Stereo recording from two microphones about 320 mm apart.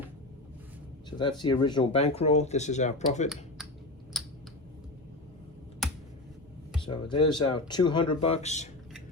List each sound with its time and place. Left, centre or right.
1.2 s speech: centre
4.1 s a sound: centre
6.7 s speech: centre